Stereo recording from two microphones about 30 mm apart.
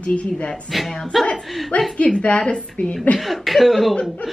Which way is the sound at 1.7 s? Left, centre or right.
Left.